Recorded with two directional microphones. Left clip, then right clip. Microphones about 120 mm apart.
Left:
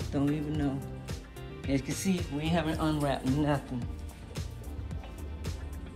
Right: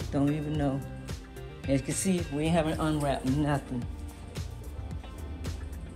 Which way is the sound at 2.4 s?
15° left (ahead or behind).